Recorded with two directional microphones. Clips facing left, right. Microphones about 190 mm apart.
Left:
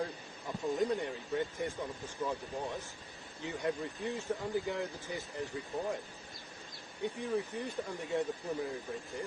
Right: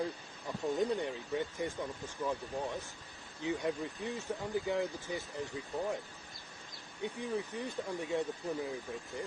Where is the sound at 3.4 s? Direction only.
15° right (ahead or behind).